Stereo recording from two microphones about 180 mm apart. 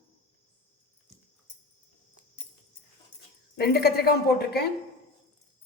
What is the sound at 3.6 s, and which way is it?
Speech, 60° left (ahead or behind).